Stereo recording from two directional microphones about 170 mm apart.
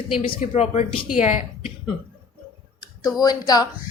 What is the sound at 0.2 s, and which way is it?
Speech, 40° left (ahead or behind).